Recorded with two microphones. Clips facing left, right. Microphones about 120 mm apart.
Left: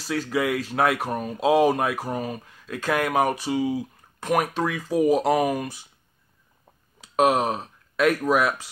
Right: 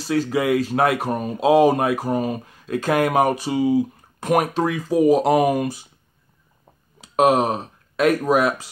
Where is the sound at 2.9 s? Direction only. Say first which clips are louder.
Right 4 dB; 35° right (ahead or behind).